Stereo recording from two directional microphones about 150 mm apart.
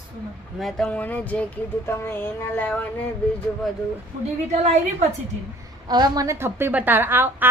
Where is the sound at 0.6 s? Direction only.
Centre (ahead or behind).